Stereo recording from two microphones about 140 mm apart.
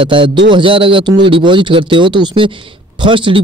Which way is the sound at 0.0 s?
40° right (ahead or behind).